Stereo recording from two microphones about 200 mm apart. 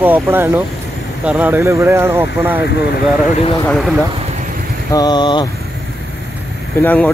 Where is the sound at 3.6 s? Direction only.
5° left (ahead or behind).